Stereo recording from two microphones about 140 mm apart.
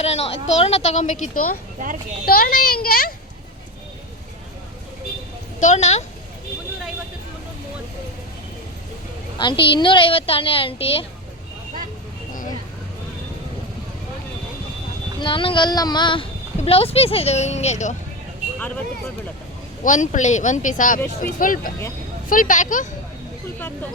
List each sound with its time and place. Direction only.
0.0 s a woman's voice: 50° left (ahead or behind)
2.2 s a child's voice: 90° left
5.5 s a woman's voice: 55° left (ahead or behind)
9.4 s a woman's voice: 35° left (ahead or behind)
15.2 s a woman's voice: 35° left (ahead or behind); by 17.9 s 55° left (ahead or behind)
19.8 s speech: 60° left (ahead or behind)